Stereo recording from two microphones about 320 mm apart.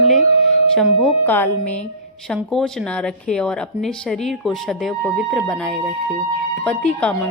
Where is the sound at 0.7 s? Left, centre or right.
Centre.